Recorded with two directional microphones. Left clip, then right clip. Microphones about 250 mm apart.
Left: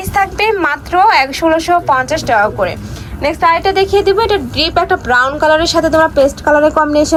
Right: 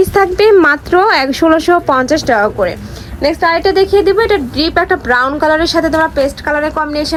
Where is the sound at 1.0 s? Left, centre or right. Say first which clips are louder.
Left 5 dB; right.